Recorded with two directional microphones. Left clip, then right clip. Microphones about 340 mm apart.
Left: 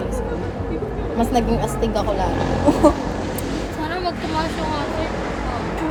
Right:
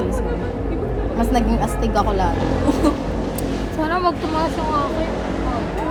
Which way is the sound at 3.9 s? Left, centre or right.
Right.